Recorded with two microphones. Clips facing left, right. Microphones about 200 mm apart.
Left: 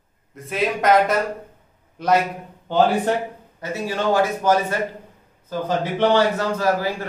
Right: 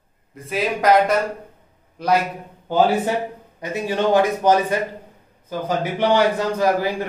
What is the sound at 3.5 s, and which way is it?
A man's voice, 20° right (ahead or behind).